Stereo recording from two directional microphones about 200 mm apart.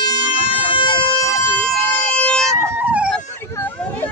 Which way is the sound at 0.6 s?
25° left (ahead or behind).